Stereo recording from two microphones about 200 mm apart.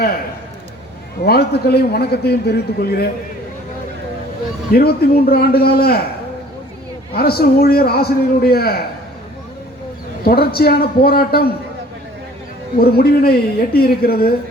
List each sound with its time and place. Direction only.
1.2 s a man's voice: 50° left (ahead or behind)
4.7 s a man's voice: 50° left (ahead or behind)
7.1 s a man's voice: 50° left (ahead or behind)
10.2 s a man's voice: 50° left (ahead or behind)
12.8 s a man's voice: 50° left (ahead or behind)